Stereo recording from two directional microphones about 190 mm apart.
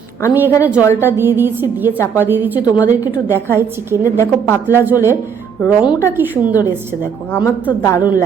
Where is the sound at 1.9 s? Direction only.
15° left (ahead or behind).